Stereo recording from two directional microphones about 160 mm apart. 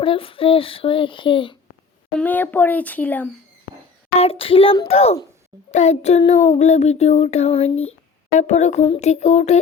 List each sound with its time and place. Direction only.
0.0 s speech: 35° left (ahead or behind)
2.1 s speech: 10° left (ahead or behind)
4.2 s speech: 35° left (ahead or behind)
5.7 s child singing: 45° left (ahead or behind)